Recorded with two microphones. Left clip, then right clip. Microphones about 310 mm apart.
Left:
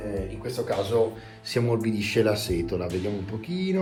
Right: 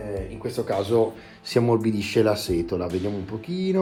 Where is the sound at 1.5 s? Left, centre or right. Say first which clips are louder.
Right 5 dB; centre.